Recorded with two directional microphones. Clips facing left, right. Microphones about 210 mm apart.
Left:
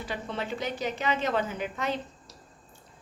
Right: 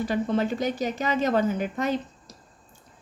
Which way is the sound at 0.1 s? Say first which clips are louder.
Right 6 dB; 45° right (ahead or behind).